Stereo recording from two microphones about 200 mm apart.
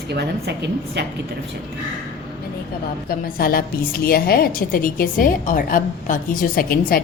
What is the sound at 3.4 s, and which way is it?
A woman's voice, 45° left (ahead or behind).